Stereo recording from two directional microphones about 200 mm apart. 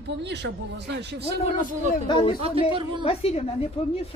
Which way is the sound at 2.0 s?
25° left (ahead or behind).